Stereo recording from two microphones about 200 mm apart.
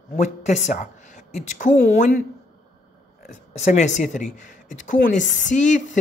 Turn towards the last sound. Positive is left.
turn(degrees=35)  # may be behind; listen again after turning